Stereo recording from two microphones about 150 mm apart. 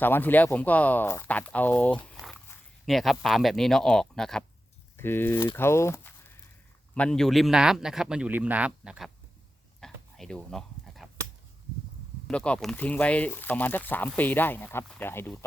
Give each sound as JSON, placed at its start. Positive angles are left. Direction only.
{"t": 0.0, "sound": "a man's voice", "side_deg": 15}
{"t": 4.9, "sound": "a man's voice", "side_deg": 15}
{"t": 9.8, "sound": "a sound", "side_deg": 5}
{"t": 12.3, "sound": "speech", "side_deg": 5}